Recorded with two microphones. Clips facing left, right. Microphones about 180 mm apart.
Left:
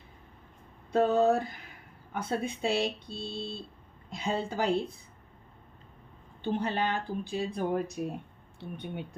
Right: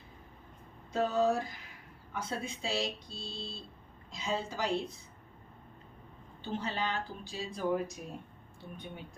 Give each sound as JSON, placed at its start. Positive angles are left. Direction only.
{"t": 0.9, "sound": "speech", "side_deg": 60}
{"t": 6.4, "sound": "speech", "side_deg": 55}